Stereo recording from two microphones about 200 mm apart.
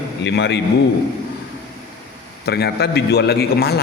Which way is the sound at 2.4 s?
55° left (ahead or behind).